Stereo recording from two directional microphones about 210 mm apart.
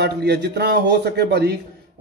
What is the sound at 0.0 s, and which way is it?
A man's voice, 55° right (ahead or behind).